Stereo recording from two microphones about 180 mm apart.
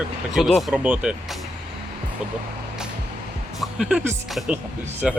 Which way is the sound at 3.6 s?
5° right (ahead or behind).